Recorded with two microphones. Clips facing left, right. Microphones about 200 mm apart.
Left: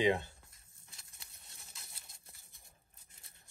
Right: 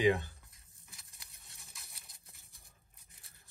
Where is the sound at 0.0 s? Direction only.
25° left (ahead or behind).